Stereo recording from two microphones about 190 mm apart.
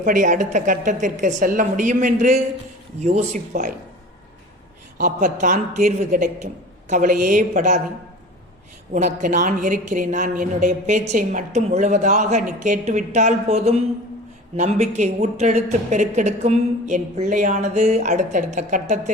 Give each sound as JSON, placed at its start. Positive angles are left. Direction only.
{"t": 0.0, "sound": "a woman's voice", "side_deg": -40}
{"t": 4.9, "sound": "a woman's voice", "side_deg": -45}
{"t": 8.9, "sound": "a woman's voice", "side_deg": -40}